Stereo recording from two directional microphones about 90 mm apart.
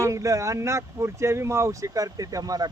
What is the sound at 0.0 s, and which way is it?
Speech, 35° right (ahead or behind).